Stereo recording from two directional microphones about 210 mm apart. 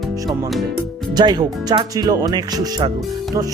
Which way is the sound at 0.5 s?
Centre (ahead or behind).